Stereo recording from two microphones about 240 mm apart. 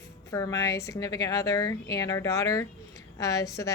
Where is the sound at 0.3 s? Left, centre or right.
Centre.